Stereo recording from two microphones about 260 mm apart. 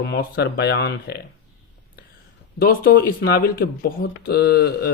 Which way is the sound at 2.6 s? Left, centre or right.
Left.